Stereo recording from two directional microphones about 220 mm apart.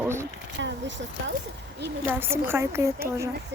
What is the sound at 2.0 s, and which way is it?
A woman's voice, 10° right (ahead or behind).